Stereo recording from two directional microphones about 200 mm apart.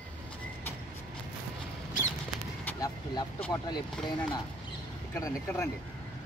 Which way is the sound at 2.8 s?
20° left (ahead or behind).